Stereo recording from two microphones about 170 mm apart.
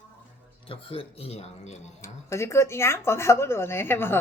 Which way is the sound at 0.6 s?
35° left (ahead or behind).